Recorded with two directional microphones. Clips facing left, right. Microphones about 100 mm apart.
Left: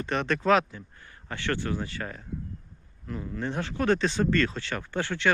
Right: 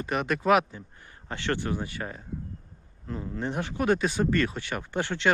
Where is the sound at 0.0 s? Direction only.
10° right (ahead or behind).